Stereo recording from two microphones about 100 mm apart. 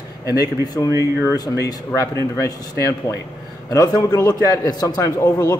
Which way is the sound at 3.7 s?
40° left (ahead or behind).